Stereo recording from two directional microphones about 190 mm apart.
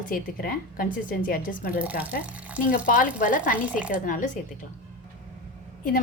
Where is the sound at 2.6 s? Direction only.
45° left (ahead or behind).